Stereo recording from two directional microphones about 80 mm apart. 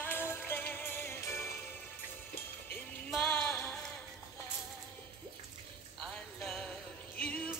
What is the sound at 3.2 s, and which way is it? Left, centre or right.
Music, left.